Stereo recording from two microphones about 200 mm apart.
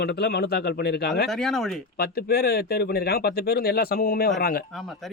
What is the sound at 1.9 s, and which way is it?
Speech, 50° left (ahead or behind).